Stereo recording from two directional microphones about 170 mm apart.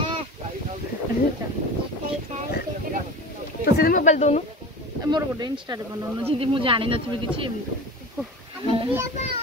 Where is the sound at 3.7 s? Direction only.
60° left (ahead or behind).